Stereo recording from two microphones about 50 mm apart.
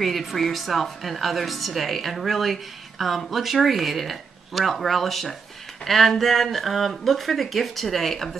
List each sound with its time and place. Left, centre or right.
0.0 s a woman's voice: centre